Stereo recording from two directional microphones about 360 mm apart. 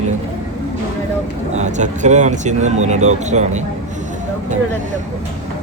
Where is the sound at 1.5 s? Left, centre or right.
Centre.